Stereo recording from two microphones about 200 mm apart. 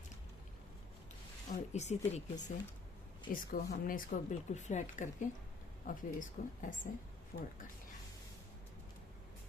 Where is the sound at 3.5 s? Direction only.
45° left (ahead or behind).